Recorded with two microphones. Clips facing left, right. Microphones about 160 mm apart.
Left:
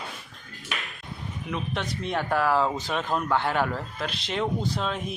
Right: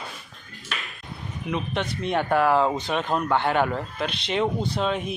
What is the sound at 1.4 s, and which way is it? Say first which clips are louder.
Speech: right 4 dB; centre (ahead or behind).